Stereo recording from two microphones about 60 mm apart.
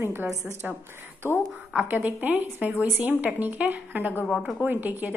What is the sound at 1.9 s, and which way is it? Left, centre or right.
A woman's voice, right.